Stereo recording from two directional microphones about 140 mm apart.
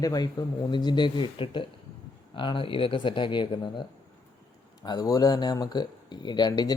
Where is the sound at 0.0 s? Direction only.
30° left (ahead or behind).